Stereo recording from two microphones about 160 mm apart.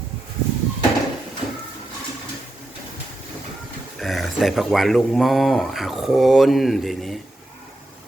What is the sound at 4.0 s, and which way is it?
Speech, centre (ahead or behind).